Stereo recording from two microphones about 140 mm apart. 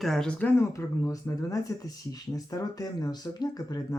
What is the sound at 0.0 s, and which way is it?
Speech, 5° left (ahead or behind).